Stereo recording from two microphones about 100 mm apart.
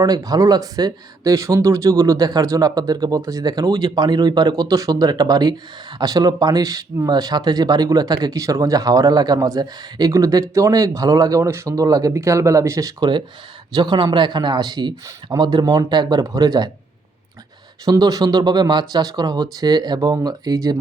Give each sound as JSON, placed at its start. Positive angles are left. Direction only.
{"t": 0.0, "sound": "speech", "side_deg": -40}
{"t": 13.0, "sound": "speech", "side_deg": -50}
{"t": 17.8, "sound": "speech", "side_deg": -35}